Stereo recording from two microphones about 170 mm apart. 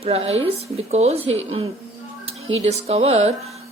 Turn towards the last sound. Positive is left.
turn(degrees=-40)  # may be behind; listen again after turning